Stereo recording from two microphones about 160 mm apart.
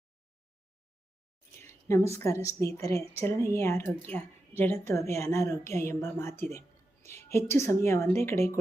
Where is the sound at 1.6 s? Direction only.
20° left (ahead or behind).